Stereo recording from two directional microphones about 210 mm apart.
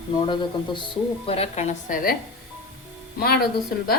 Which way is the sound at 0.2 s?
20° left (ahead or behind).